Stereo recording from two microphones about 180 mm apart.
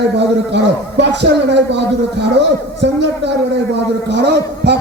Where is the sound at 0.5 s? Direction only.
70° right (ahead or behind).